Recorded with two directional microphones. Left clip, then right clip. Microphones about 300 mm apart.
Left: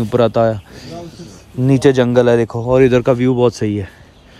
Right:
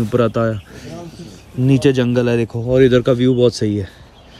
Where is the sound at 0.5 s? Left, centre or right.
Centre.